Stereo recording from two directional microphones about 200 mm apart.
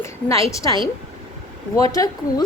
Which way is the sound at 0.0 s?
15° left (ahead or behind).